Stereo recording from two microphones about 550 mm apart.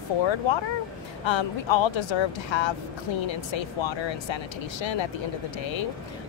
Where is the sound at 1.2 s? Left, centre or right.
Left.